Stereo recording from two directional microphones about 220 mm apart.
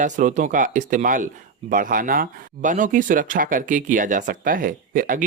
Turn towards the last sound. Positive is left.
turn(degrees=-40)  # may be behind; listen again after turning